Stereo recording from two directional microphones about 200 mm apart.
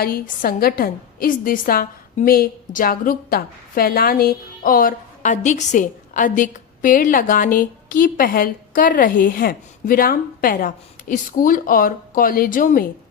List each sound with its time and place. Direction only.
0.0 s a woman's voice: 50° left (ahead or behind)